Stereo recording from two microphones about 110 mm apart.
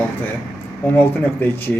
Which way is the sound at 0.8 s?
20° left (ahead or behind).